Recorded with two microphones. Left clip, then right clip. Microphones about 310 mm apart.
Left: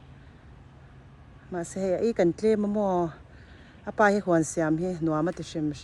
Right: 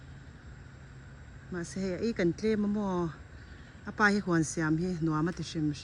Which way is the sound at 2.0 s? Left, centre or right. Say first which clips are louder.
Left 6 dB; centre.